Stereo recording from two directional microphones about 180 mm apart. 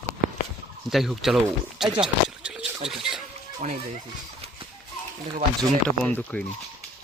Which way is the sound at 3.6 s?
45° right (ahead or behind).